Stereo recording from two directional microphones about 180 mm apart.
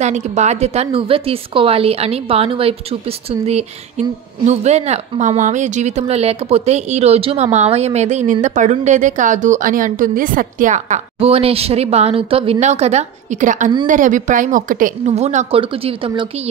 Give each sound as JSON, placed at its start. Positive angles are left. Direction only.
{"t": 0.0, "sound": "a woman's voice", "side_deg": -40}